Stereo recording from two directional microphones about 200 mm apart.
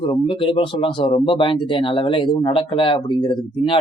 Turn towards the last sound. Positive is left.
turn(degrees=25)  # may be behind; listen again after turning